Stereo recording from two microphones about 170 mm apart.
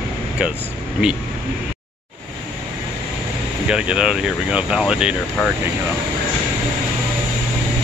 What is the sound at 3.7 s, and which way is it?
Speech, 5° right (ahead or behind).